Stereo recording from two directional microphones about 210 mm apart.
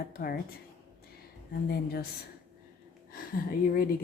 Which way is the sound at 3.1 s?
45° left (ahead or behind).